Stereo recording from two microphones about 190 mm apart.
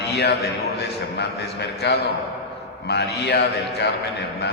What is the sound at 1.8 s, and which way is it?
A man's voice, 65° left (ahead or behind).